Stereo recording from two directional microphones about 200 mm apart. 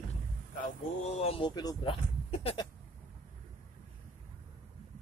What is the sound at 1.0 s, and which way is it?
Speech, 30° left (ahead or behind).